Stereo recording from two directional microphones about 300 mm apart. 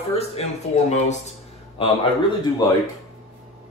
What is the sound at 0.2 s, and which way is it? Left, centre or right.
Speech, left.